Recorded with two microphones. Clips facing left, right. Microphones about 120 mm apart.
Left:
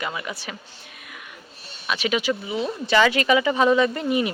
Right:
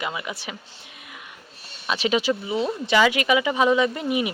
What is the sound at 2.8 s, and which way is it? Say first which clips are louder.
Speech: left 2 dB; 15° right (ahead or behind).